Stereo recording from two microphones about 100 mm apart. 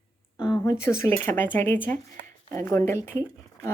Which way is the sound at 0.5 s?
35° left (ahead or behind).